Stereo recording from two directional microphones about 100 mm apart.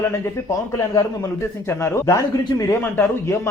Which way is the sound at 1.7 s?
25° left (ahead or behind).